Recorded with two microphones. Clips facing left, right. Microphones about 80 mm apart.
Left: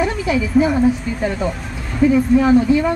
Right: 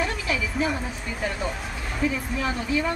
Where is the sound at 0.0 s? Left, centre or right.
Centre.